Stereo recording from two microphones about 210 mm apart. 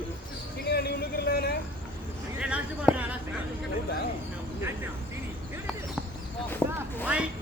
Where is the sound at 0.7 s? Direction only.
50° left (ahead or behind).